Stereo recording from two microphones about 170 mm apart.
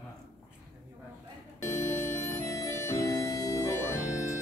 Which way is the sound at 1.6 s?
15° left (ahead or behind).